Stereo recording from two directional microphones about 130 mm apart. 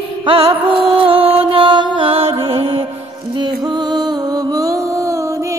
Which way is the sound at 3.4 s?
35° right (ahead or behind).